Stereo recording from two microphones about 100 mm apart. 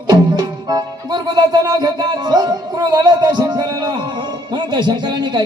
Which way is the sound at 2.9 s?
45° right (ahead or behind).